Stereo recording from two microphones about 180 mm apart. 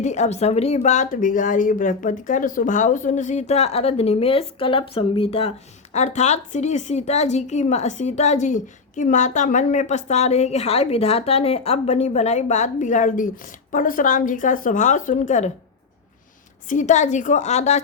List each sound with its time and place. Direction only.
0.0 s speech: 40° left (ahead or behind)
16.6 s speech: 40° left (ahead or behind)